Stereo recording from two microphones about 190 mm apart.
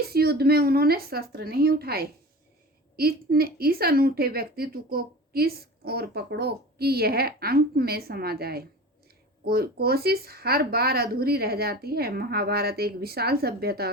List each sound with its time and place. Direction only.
0.1 s a woman's voice: 55° right (ahead or behind)